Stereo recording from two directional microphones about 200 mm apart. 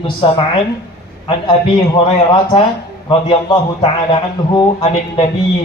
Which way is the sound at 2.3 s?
25° left (ahead or behind).